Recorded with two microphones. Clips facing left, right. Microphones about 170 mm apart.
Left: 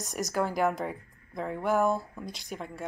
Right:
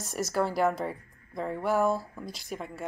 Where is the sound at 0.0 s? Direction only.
15° left (ahead or behind).